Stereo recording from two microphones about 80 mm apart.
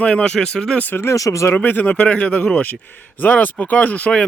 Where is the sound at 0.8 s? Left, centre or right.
Left.